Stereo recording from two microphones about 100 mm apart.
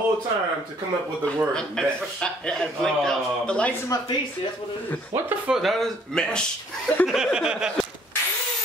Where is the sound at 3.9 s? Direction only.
35° left (ahead or behind).